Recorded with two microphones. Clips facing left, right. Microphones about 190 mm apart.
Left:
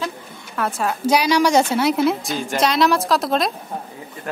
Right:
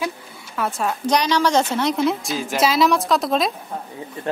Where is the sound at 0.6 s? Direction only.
Centre (ahead or behind).